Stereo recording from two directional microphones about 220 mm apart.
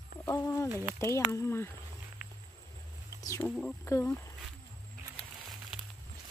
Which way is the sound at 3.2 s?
15° left (ahead or behind).